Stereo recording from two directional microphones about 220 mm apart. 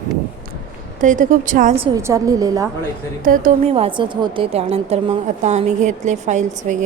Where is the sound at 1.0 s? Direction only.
35° right (ahead or behind).